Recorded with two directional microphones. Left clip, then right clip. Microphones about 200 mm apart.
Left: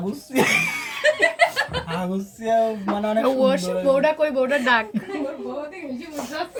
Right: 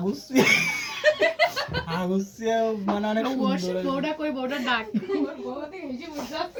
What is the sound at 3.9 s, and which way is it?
Speech, 55° left (ahead or behind).